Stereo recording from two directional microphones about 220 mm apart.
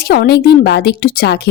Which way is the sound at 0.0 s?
45° left (ahead or behind).